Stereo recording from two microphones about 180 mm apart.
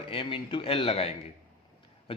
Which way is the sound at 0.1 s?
30° left (ahead or behind).